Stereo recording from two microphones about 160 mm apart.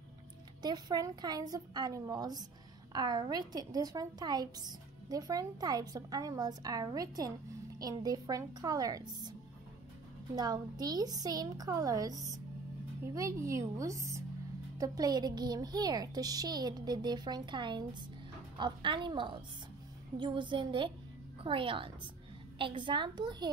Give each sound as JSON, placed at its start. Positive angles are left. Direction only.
{"t": 0.6, "sound": "a woman's voice", "side_deg": -25}
{"t": 10.3, "sound": "a woman's voice", "side_deg": -25}